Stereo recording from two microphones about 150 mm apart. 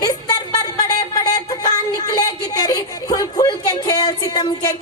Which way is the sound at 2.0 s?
25° left (ahead or behind).